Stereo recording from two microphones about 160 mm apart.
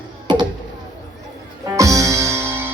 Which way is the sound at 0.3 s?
30° right (ahead or behind).